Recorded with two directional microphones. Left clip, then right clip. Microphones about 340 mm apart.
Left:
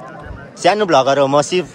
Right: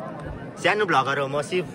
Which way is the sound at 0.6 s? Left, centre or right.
Centre.